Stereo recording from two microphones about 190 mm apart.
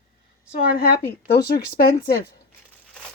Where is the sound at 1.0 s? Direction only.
60° left (ahead or behind).